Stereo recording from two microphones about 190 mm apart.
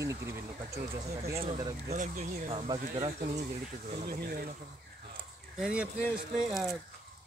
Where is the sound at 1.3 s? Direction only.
30° right (ahead or behind).